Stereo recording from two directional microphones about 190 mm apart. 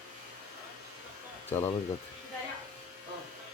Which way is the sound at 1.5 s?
10° left (ahead or behind).